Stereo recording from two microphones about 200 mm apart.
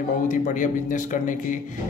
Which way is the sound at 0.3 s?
40° left (ahead or behind).